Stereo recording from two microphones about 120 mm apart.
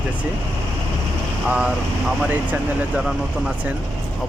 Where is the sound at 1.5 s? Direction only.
10° right (ahead or behind).